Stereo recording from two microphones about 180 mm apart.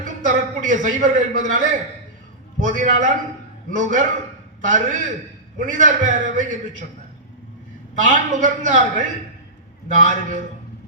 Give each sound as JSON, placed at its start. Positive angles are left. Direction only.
{"t": 0.0, "sound": "a man's voice", "side_deg": -45}
{"t": 8.0, "sound": "a man's voice", "side_deg": -45}